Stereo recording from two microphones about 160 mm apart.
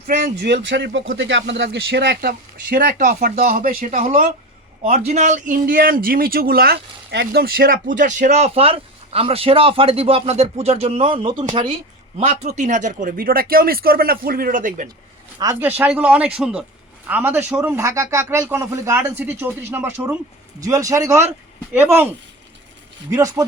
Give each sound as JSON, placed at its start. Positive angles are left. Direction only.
{"t": 0.4, "sound": "speech", "side_deg": -90}
{"t": 4.8, "sound": "a man's voice", "side_deg": -45}
{"t": 15.4, "sound": "speech", "side_deg": -25}
{"t": 15.8, "sound": "a man's voice", "side_deg": -10}